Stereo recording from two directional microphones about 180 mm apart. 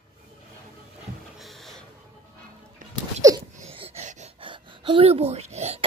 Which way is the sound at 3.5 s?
35° right (ahead or behind).